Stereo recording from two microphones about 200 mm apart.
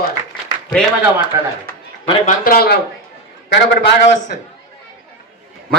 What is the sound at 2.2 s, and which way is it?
Speech, 45° left (ahead or behind).